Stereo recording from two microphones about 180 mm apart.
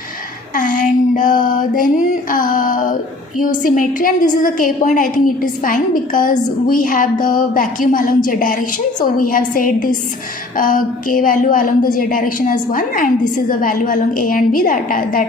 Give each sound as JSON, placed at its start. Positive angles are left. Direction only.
{"t": 0.5, "sound": "a woman's voice", "side_deg": 45}